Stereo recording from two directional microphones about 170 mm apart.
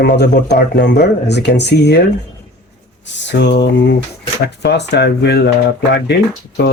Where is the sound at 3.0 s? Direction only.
90° left; by 5.5 s 75° left (ahead or behind).